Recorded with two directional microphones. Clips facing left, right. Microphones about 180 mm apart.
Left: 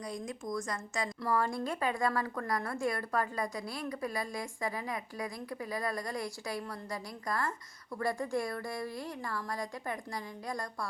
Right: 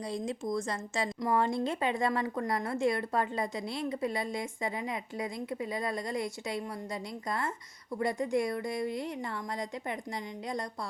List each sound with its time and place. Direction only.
0.0 s a woman's voice: 25° right (ahead or behind)